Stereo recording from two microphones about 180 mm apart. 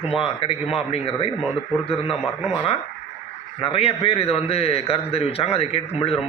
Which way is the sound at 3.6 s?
35° left (ahead or behind).